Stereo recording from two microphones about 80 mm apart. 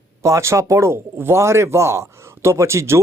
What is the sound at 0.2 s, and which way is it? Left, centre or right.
Speech, right.